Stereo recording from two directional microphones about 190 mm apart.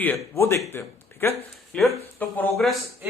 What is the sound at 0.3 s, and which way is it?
Speech, 15° left (ahead or behind).